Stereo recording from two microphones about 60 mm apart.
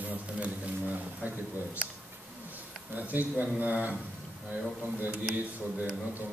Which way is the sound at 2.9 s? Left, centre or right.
Right.